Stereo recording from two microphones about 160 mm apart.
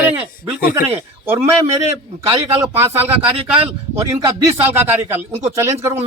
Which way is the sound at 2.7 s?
15° right (ahead or behind).